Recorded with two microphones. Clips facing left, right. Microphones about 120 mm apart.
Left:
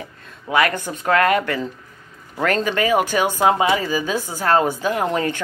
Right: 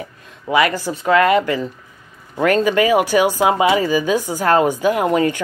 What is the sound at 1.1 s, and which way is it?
Speech, 45° left (ahead or behind).